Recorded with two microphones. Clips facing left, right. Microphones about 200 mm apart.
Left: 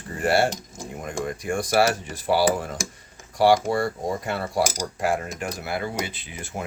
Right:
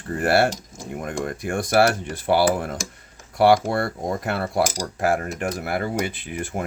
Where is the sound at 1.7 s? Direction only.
60° right (ahead or behind).